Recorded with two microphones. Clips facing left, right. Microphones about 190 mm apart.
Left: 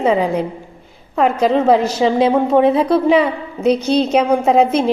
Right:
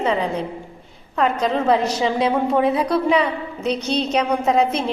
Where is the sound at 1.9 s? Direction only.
25° left (ahead or behind).